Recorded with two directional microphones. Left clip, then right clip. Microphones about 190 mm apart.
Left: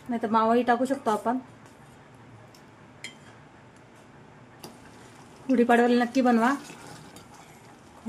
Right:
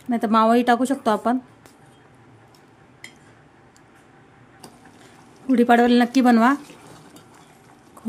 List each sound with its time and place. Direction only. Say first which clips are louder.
0.1 s speech: right 5 dB; 50° right (ahead or behind)
5.5 s speech: right 5 dB; 45° right (ahead or behind)